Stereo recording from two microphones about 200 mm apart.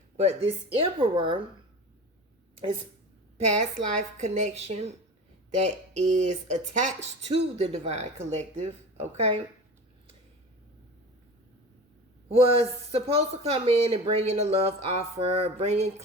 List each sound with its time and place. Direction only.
0.2 s speech: 30° right (ahead or behind)
3.3 s speech: 35° right (ahead or behind)
5.9 s speech: 35° right (ahead or behind)
12.4 s speech: 30° right (ahead or behind)